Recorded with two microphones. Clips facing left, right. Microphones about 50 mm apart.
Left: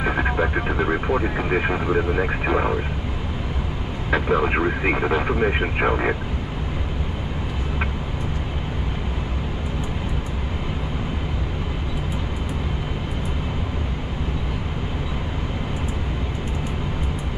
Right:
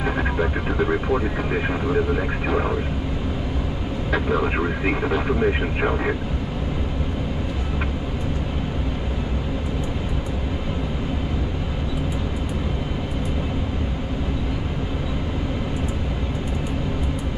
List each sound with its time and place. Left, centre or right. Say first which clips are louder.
0.0 s speech: left 1 dB; centre
4.1 s speech: left 2 dB; left